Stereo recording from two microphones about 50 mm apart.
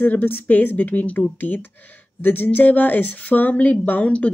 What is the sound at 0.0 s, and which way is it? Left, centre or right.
Speech, left.